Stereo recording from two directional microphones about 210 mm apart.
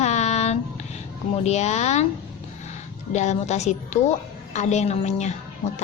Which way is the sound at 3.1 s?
35° left (ahead or behind).